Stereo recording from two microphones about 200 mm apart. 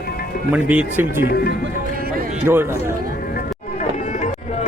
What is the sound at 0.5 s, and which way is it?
Speech, 5° right (ahead or behind).